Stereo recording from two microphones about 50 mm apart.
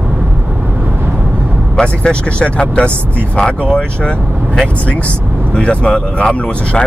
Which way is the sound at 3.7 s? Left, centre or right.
Centre.